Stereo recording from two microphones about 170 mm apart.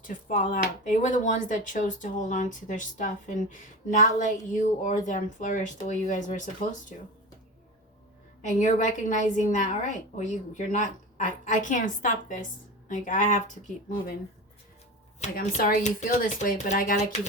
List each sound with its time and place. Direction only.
0.1 s speech: 50° left (ahead or behind)
8.4 s speech: 45° left (ahead or behind)
15.4 s speech: 55° left (ahead or behind)